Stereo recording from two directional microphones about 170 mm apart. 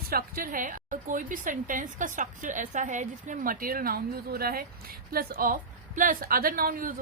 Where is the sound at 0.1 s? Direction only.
60° right (ahead or behind).